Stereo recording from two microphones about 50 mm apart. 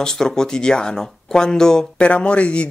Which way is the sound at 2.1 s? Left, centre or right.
Left.